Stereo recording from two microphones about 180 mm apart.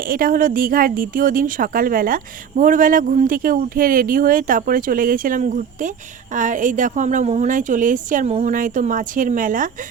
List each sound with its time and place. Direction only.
0.0 s a woman's voice: 50° right (ahead or behind)